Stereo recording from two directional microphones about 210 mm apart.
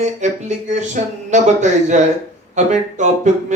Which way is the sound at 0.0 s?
35° right (ahead or behind).